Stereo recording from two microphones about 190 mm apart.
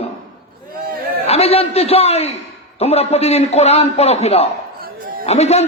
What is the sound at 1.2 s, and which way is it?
Speech, 30° left (ahead or behind).